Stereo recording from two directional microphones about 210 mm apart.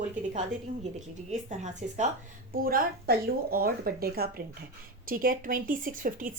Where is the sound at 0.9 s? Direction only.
35° right (ahead or behind).